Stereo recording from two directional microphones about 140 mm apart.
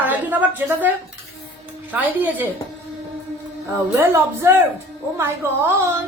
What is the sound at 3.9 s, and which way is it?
A woman's voice, 20° right (ahead or behind).